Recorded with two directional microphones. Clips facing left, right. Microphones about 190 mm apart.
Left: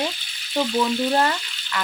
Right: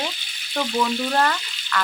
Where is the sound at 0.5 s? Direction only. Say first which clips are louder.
Left 2 dB; 15° left (ahead or behind).